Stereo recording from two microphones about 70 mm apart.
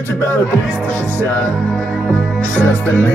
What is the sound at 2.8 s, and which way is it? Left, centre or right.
Music, left.